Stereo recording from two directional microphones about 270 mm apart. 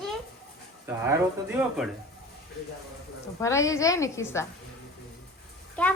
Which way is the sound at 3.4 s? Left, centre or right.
Centre.